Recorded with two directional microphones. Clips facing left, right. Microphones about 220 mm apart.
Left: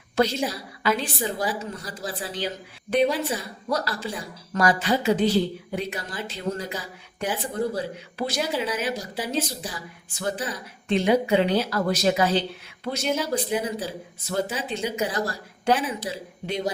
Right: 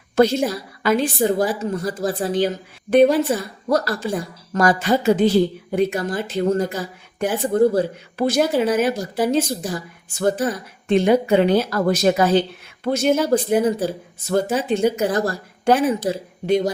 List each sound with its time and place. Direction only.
0.2 s a woman's voice: 50° right (ahead or behind)